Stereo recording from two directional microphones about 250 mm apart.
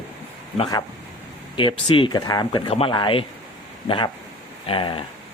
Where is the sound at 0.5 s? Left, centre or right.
Centre.